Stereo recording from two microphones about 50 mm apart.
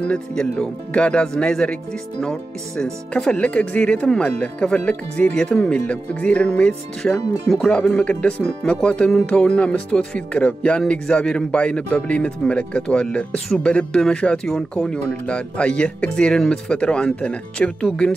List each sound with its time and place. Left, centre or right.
0.0 s speech: centre
15.0 s speech: left